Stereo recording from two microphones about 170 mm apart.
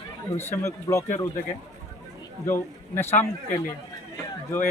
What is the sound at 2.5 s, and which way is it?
Speech, 15° left (ahead or behind).